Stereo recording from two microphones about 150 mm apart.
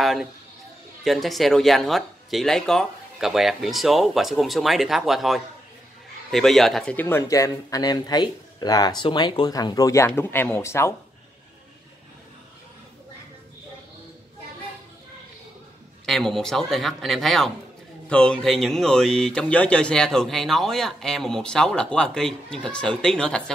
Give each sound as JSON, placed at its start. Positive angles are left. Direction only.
{"t": 0.0, "sound": "a sound", "side_deg": 0}
{"t": 1.0, "sound": "speech", "side_deg": 0}
{"t": 7.0, "sound": "speech", "side_deg": 15}
{"t": 16.1, "sound": "speech", "side_deg": 0}